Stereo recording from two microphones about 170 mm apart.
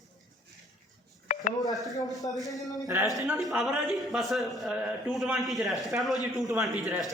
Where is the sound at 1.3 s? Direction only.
45° left (ahead or behind).